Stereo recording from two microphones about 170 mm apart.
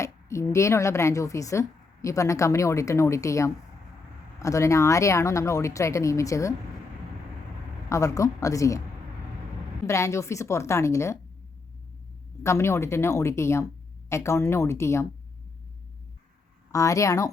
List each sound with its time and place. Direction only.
0.0 s speech: 15° left (ahead or behind)
7.9 s speech: 20° left (ahead or behind)
9.8 s speech: 15° left (ahead or behind)
12.4 s speech: 15° left (ahead or behind)
16.7 s speech: 20° left (ahead or behind)